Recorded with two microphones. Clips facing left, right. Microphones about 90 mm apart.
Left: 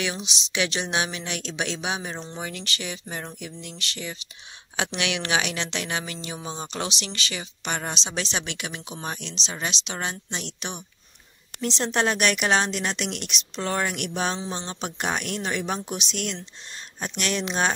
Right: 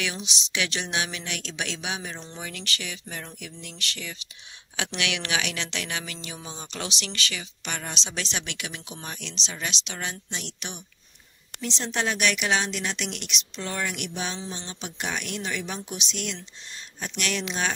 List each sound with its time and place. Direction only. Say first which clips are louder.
0.0 s speech: left 2 dB; 25° left (ahead or behind)
11.6 s a woman's voice: left 4 dB; 45° left (ahead or behind)
17.2 s speech: left 3 dB; 35° left (ahead or behind)